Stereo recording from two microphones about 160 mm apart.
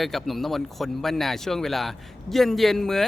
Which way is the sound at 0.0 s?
Centre (ahead or behind).